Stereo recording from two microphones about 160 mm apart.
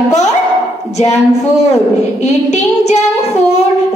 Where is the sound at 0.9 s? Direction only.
45° left (ahead or behind).